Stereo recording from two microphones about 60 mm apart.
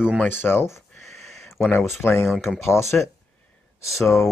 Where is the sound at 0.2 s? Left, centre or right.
Left.